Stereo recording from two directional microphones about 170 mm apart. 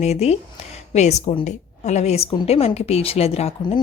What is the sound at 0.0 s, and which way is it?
Speech, 40° left (ahead or behind).